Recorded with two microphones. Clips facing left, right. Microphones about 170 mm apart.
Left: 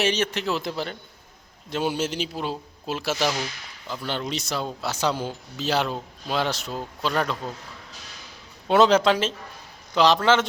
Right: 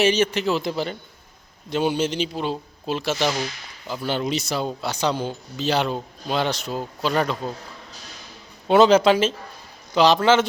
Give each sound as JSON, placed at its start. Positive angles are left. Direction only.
{"t": 0.0, "sound": "speech", "side_deg": 0}
{"t": 3.8, "sound": "speech", "side_deg": -5}
{"t": 8.6, "sound": "speech", "side_deg": 0}